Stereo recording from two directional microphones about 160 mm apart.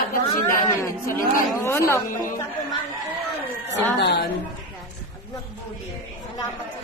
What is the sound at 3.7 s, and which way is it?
Speech, 90° left.